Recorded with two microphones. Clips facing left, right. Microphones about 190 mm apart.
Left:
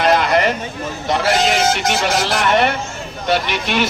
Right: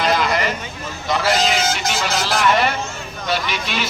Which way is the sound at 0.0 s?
60° left (ahead or behind).